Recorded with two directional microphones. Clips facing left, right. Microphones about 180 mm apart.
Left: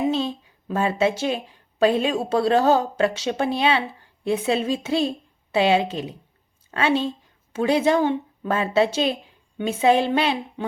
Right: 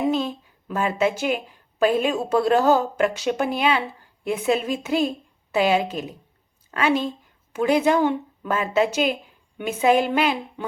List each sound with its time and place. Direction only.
0.7 s a woman's voice: 30° left (ahead or behind)